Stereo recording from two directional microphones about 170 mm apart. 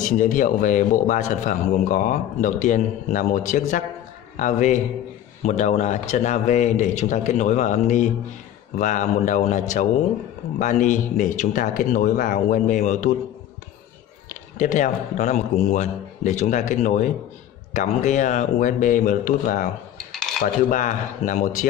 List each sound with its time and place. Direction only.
0.0 s a man's voice: 50° left (ahead or behind)
14.3 s a man's voice: 50° left (ahead or behind)
20.7 s a man's voice: 50° left (ahead or behind)